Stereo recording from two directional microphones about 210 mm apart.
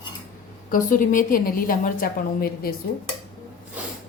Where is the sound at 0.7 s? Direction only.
40° left (ahead or behind).